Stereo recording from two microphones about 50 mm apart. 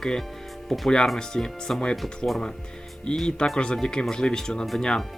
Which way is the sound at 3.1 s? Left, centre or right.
Centre.